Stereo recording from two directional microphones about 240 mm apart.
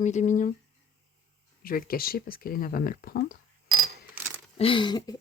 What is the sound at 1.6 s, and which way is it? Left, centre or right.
Speech, left.